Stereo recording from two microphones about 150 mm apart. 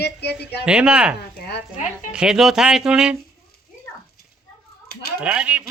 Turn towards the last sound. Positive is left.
turn(degrees=-5)  # may be behind; listen again after turning